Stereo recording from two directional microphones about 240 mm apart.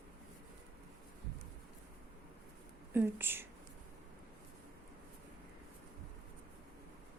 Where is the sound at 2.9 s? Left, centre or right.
Centre.